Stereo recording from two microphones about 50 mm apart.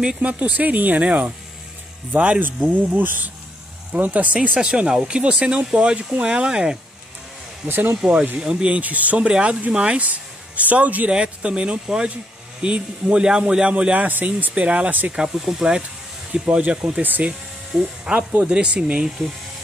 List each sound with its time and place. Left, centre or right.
0.2 s speech: right
3.0 s speech: right
4.6 s speech: centre
7.6 s speech: right
8.0 s speech: right
11.1 s speech: centre
14.0 s speech: right
15.0 s speech: centre
16.5 s speech: right
17.0 s speech: right
17.3 s speech: right